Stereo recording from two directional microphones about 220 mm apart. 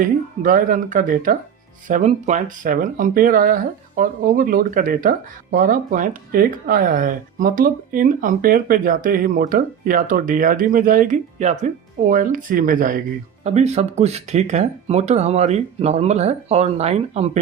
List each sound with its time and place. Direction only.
0.0 s speech: 40° right (ahead or behind)